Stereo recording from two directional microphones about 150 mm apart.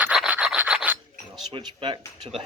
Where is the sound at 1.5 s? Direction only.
30° right (ahead or behind).